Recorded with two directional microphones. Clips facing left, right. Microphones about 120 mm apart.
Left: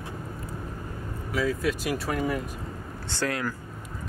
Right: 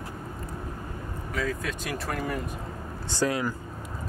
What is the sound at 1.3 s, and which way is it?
Speech, 5° left (ahead or behind).